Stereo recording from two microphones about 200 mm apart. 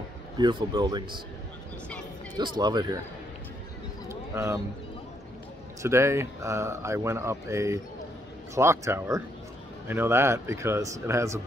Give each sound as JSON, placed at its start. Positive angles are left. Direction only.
{"t": 0.4, "sound": "speech", "side_deg": -25}
{"t": 2.3, "sound": "speech", "side_deg": -20}
{"t": 4.1, "sound": "bird", "side_deg": -15}
{"t": 5.8, "sound": "speech", "side_deg": -15}